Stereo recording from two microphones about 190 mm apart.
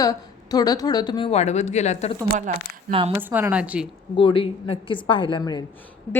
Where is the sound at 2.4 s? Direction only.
35° right (ahead or behind).